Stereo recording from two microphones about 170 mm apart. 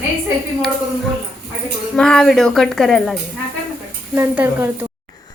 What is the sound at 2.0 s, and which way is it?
Speech, 5° left (ahead or behind).